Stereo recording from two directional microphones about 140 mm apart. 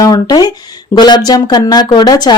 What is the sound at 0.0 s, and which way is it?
A woman's voice, 30° left (ahead or behind).